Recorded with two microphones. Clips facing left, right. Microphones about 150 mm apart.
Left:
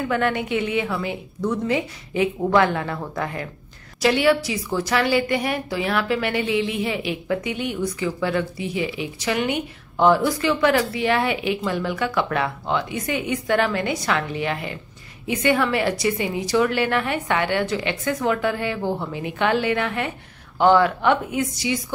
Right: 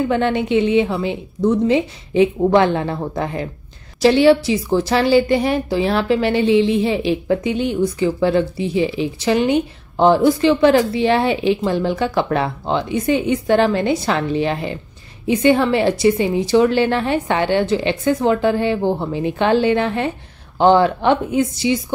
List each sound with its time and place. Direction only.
0.1 s a woman's voice: 25° right (ahead or behind)